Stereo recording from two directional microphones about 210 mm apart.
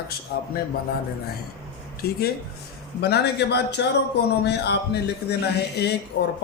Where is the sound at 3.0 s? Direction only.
50° left (ahead or behind).